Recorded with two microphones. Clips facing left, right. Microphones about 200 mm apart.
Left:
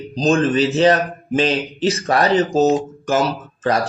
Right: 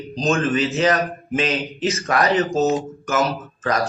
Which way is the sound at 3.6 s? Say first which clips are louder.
Left 3 dB; 30° left (ahead or behind).